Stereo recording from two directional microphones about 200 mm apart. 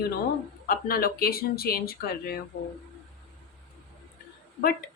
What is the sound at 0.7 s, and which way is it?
A woman's voice, 45° left (ahead or behind).